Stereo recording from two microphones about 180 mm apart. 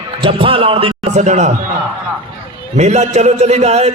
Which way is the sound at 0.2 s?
30° right (ahead or behind).